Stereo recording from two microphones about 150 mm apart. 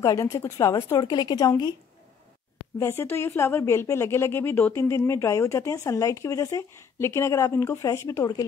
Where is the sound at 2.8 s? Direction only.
15° left (ahead or behind).